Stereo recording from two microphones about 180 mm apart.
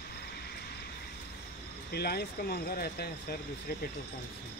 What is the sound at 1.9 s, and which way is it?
Speech, 60° left (ahead or behind).